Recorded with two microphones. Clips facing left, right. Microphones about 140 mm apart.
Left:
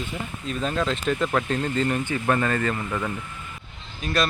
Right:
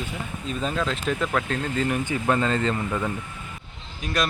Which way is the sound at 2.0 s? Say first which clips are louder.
Even; 15° right (ahead or behind).